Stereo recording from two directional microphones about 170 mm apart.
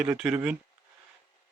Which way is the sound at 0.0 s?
5° right (ahead or behind).